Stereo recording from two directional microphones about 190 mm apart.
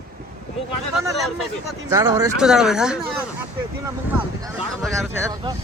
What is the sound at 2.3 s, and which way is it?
Speech, 5° right (ahead or behind).